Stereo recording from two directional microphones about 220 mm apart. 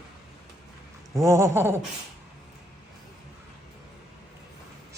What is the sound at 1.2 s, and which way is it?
Speech, 15° right (ahead or behind).